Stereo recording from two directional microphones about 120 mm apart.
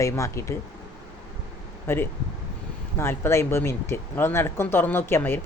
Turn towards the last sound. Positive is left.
turn(degrees=20)  # may be behind; listen again after turning